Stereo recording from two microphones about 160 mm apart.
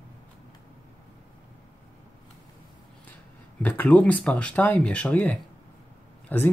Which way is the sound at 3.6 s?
10° left (ahead or behind).